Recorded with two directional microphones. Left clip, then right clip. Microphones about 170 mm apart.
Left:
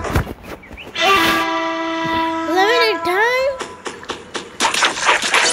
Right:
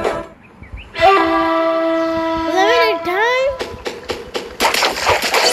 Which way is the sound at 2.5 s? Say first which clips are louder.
Right 1 dB; 5° right (ahead or behind).